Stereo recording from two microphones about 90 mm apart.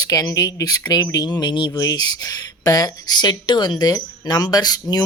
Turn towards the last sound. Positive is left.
turn(degrees=50)  # may be behind; listen again after turning